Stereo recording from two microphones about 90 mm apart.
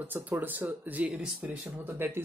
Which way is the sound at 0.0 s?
20° right (ahead or behind).